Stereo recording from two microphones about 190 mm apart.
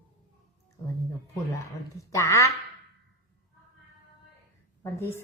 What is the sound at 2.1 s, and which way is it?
Speech, 15° left (ahead or behind).